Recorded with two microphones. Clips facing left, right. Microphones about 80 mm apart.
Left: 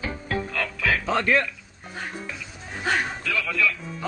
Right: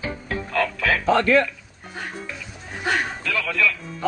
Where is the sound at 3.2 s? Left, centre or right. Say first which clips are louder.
Right 2 dB; right.